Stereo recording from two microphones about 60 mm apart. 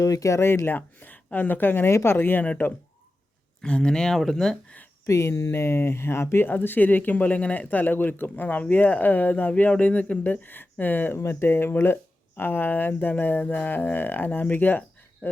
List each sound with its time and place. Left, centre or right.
0.0 s speech: left
0.3 s speech: left
0.6 s speech: left
3.6 s speech: centre
5.0 s speech: left
6.5 s speech: left
11.2 s speech: left